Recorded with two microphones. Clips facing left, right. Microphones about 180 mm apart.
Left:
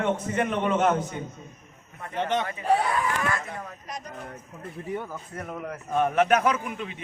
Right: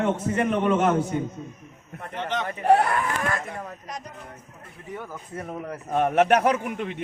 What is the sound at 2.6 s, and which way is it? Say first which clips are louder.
Speech: right 6 dB; 65° right (ahead or behind).